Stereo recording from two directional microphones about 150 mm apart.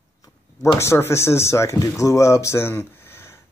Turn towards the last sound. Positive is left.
turn(degrees=15)  # may be behind; listen again after turning